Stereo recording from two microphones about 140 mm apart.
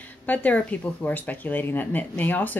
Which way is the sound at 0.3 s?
10° left (ahead or behind).